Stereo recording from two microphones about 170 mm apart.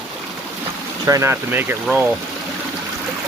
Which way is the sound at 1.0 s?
15° right (ahead or behind).